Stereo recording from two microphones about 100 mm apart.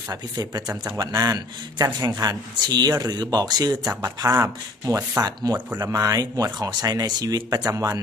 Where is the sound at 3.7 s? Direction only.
15° right (ahead or behind).